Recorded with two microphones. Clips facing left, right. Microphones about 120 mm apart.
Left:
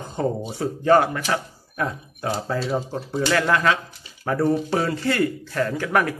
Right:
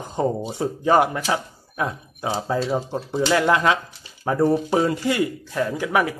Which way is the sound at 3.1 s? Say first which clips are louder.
Right 2 dB; 20° right (ahead or behind).